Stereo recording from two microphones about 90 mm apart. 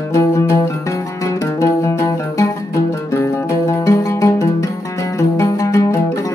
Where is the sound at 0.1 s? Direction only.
35° left (ahead or behind).